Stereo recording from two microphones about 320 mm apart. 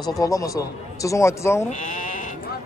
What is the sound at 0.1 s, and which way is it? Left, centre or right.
A man's voice, centre.